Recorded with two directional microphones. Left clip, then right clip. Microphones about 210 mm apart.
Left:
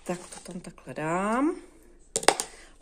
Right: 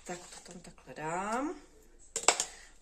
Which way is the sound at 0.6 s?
50° left (ahead or behind).